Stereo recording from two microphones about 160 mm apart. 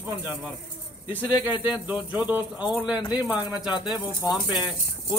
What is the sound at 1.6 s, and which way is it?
Speech, 10° right (ahead or behind).